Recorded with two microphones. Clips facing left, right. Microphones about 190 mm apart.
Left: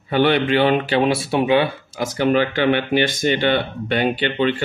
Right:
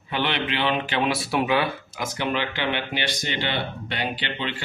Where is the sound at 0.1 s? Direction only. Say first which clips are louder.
Left 10 dB; 45° left (ahead or behind); by 2.0 s 25° left (ahead or behind).